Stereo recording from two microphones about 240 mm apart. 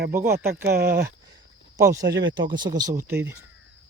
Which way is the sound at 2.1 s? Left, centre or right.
Right.